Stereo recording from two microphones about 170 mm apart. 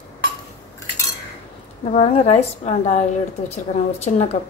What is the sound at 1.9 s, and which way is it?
A woman's voice, 35° left (ahead or behind).